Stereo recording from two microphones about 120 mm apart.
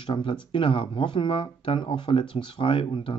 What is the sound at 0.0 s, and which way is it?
Speech, 45° left (ahead or behind).